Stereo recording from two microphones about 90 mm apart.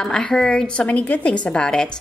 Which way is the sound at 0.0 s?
5° left (ahead or behind).